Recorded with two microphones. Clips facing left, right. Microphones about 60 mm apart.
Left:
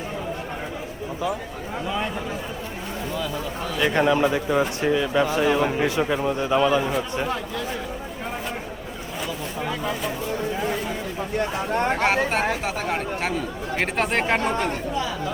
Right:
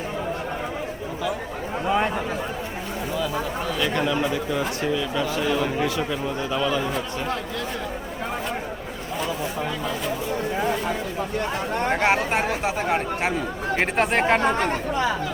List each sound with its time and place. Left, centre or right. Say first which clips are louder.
3.8 s speech: left 5 dB; left
9.2 s speech: right 2 dB; centre
11.9 s speech: right 3 dB; centre
14.7 s speech: right 3 dB; right